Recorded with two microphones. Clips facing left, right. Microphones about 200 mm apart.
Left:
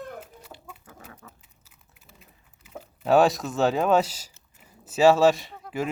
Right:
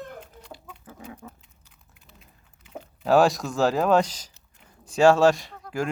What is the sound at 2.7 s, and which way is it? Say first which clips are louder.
Speech: even; centre (ahead or behind).